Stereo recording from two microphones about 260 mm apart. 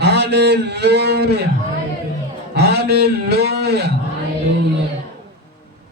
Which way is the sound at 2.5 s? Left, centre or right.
Right.